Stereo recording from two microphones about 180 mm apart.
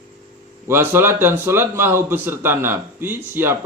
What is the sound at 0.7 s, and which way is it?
A man's voice, 10° right (ahead or behind).